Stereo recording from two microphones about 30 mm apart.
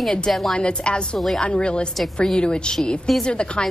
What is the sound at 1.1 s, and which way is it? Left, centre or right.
Speech, centre.